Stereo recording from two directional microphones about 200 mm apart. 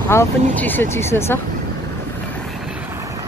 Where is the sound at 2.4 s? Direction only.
Centre (ahead or behind).